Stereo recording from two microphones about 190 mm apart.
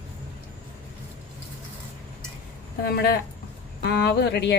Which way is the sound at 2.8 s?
55° left (ahead or behind).